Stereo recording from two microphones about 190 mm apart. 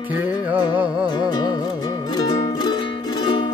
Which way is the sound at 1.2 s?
20° left (ahead or behind).